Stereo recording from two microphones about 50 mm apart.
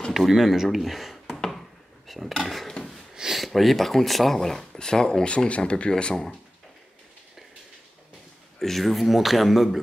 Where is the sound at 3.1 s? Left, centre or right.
Centre.